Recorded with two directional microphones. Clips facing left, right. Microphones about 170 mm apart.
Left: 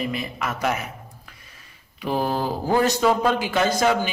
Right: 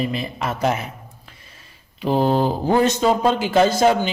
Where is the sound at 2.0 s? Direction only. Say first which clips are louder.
Right 6 dB; 25° right (ahead or behind).